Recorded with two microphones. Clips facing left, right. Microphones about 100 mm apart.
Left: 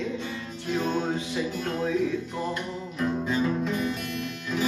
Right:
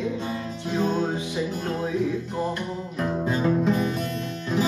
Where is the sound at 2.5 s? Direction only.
40° right (ahead or behind).